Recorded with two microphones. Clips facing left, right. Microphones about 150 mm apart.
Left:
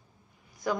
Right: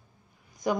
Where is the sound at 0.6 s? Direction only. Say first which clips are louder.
Right 3 dB; 20° right (ahead or behind).